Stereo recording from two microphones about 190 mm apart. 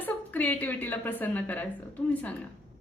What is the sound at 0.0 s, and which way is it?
A woman's voice, 10° left (ahead or behind).